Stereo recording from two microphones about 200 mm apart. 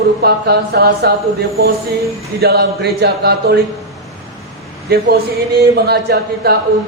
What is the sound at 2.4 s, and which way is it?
Speech, 55° right (ahead or behind).